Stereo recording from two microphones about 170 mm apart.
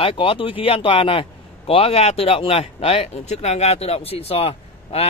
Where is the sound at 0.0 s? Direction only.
30° left (ahead or behind).